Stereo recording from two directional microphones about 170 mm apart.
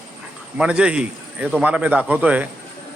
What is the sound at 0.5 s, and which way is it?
A man's voice, 5° right (ahead or behind).